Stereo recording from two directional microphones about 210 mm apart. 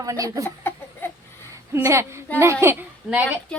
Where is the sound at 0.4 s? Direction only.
10° left (ahead or behind).